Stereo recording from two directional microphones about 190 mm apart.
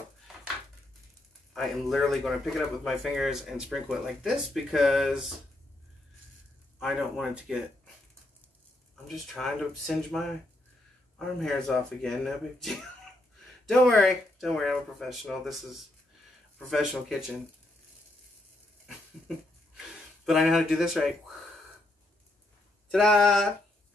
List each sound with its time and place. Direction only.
1.5 s speech: centre (ahead or behind)
6.8 s speech: centre (ahead or behind)
9.0 s speech: centre (ahead or behind)
20.2 s speech: centre (ahead or behind)
22.8 s speech: 5° left (ahead or behind)